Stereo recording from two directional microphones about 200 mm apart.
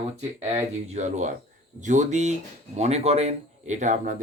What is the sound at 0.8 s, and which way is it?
Speech, 35° right (ahead or behind).